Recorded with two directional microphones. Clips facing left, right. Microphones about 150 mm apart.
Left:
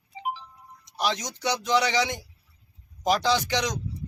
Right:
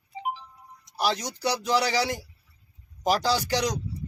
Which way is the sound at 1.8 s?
35° right (ahead or behind).